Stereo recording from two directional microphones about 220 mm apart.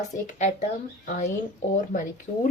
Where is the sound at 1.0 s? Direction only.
35° left (ahead or behind).